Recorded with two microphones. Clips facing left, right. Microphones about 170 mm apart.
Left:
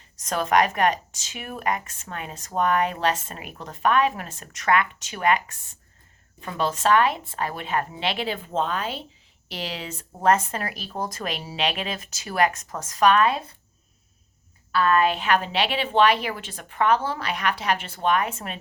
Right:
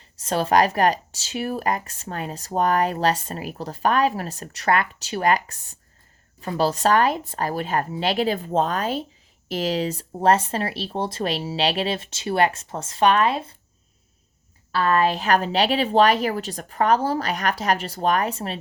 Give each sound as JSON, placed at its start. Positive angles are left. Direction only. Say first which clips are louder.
{"t": 0.2, "sound": "speech", "louder": "right 2 dB", "side_deg": -30}
{"t": 14.7, "sound": "speech", "louder": "even", "side_deg": -35}